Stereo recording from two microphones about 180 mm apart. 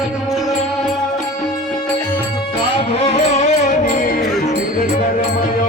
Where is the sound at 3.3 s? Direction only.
40° left (ahead or behind).